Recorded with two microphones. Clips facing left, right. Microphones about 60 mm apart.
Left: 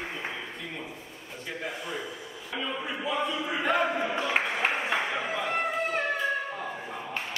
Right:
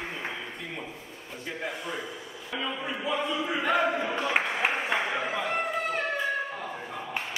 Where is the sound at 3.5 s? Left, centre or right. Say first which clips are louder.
Right 1 dB; centre.